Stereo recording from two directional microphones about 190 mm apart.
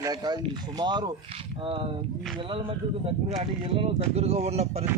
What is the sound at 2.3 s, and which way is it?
Speech, 25° right (ahead or behind).